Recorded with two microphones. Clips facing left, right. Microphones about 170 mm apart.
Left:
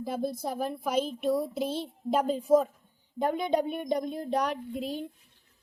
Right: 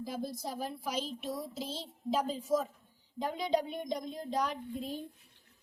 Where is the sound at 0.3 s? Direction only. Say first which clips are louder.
Left 6 dB; 55° left (ahead or behind); by 5.0 s 75° left (ahead or behind).